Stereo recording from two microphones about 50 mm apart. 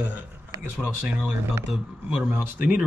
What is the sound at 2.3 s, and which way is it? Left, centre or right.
Speech, right.